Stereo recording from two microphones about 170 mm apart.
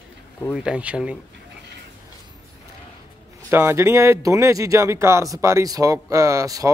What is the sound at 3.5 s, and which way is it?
Speech, 15° right (ahead or behind).